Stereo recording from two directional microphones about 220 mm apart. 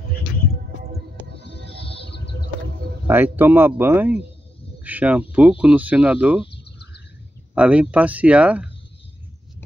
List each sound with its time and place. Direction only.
3.1 s speech: 10° right (ahead or behind)
6.5 s a sound: 50° left (ahead or behind)
7.5 s speech: 5° right (ahead or behind)